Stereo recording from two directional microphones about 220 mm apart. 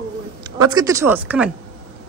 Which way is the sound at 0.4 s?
20° right (ahead or behind).